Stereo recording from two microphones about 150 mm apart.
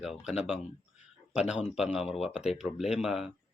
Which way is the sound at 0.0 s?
5° right (ahead or behind).